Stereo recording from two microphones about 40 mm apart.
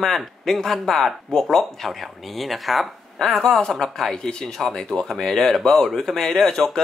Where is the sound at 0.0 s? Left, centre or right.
Centre.